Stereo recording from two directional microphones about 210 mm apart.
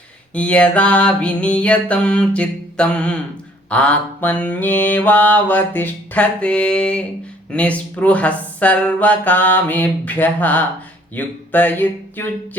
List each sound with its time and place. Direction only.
0.3 s music: 5° left (ahead or behind)
3.7 s mantra: 5° left (ahead or behind)